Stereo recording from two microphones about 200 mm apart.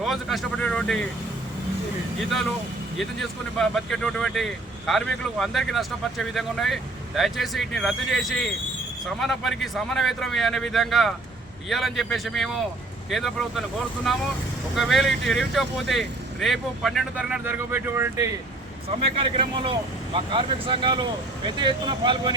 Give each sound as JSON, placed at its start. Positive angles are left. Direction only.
{"t": 0.0, "sound": "speech", "side_deg": 0}
{"t": 3.0, "sound": "speech", "side_deg": 0}
{"t": 19.1, "sound": "speech", "side_deg": -25}